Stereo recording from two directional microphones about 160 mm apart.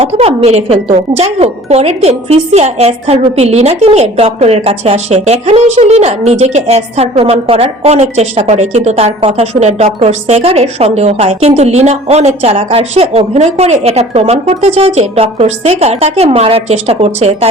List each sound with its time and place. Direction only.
0.0 s speech: 40° right (ahead or behind)